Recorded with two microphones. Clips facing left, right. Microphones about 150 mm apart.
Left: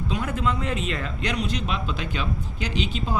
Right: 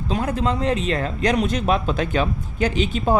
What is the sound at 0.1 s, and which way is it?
Speech, 35° right (ahead or behind).